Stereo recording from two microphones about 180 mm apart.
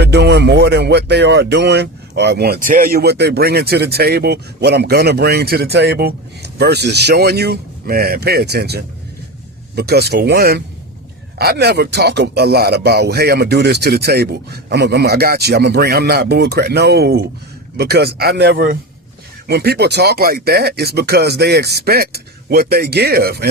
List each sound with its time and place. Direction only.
0.0 s speech: 70° right (ahead or behind)